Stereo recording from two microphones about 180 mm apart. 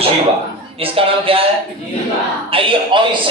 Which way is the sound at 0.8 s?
30° right (ahead or behind).